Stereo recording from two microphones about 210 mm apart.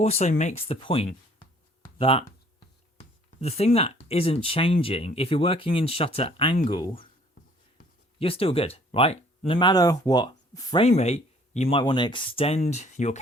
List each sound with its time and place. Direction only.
0.0 s speech: 30° left (ahead or behind)
3.4 s speech: 30° left (ahead or behind)
8.2 s speech: 25° left (ahead or behind)